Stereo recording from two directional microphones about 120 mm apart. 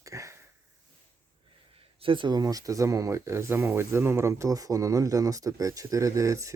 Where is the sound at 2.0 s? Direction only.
45° right (ahead or behind).